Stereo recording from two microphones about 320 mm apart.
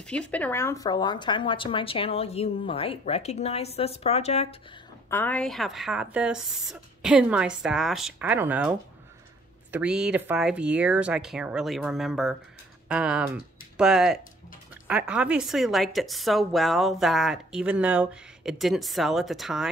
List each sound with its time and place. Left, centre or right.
0.0 s speech: centre
5.1 s a woman's voice: centre